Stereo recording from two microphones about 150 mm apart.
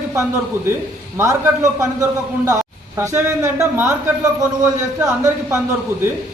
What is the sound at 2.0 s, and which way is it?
Speech, 20° right (ahead or behind).